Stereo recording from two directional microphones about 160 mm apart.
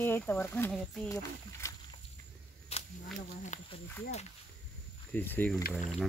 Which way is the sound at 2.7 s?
40° left (ahead or behind).